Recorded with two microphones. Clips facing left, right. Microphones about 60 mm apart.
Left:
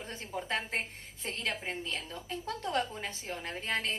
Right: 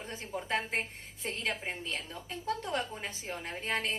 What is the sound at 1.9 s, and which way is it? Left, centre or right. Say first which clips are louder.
A woman's voice: left 1 dB; right.